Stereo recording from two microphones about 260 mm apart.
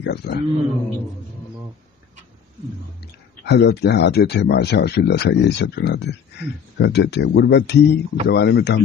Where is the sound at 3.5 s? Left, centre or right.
Left.